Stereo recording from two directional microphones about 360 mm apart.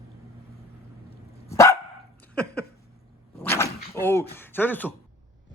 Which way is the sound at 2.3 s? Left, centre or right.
Centre.